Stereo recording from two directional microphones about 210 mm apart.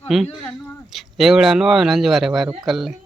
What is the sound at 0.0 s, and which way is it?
Speech, centre (ahead or behind).